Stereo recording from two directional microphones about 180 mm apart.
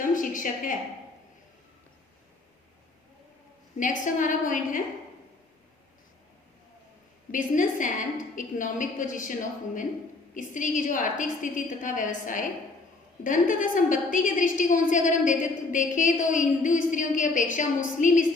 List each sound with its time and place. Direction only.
0.0 s a sound: 50° left (ahead or behind)
3.8 s a woman's voice: 45° left (ahead or behind)
7.3 s a woman's voice: 45° left (ahead or behind)